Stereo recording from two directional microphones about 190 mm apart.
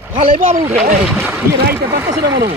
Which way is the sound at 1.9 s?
20° right (ahead or behind).